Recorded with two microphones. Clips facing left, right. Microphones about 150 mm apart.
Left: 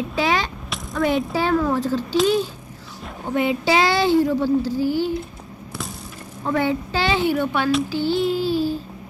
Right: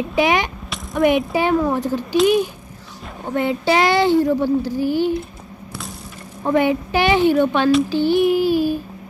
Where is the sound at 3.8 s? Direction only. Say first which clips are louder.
Right 3 dB; 20° right (ahead or behind).